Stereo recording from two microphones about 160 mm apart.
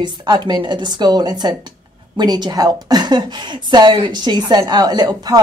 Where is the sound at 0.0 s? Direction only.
25° right (ahead or behind).